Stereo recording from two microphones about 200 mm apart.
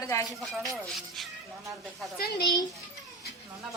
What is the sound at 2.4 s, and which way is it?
Speech, 20° left (ahead or behind).